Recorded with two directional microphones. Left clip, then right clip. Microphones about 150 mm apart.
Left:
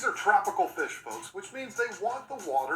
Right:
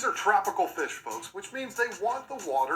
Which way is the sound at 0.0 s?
5° right (ahead or behind).